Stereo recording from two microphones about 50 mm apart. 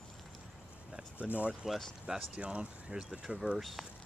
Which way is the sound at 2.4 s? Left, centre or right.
Right.